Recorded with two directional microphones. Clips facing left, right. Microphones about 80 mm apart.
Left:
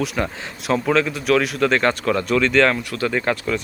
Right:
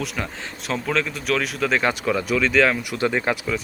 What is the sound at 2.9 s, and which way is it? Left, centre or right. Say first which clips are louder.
Speech: left 1 dB; centre.